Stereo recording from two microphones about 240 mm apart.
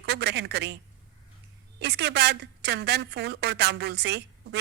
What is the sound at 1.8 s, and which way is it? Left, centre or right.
A woman's voice, right.